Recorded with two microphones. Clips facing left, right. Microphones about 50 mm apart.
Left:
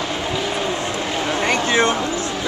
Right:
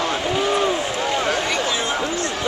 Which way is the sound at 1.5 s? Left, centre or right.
Left.